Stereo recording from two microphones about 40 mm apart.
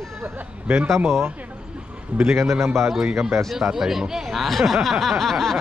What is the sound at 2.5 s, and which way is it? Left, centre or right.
Speech, right.